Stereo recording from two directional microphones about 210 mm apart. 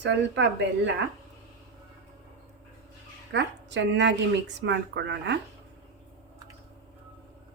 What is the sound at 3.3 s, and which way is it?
A woman's voice, 55° right (ahead or behind).